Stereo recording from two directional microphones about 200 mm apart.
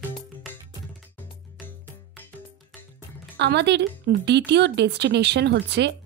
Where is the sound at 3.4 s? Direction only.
60° right (ahead or behind).